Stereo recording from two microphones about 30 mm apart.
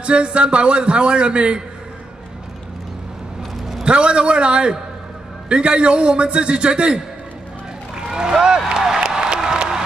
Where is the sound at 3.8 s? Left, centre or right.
Right.